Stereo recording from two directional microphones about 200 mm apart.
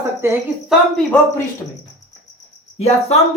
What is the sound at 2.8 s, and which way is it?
Speech, 35° left (ahead or behind).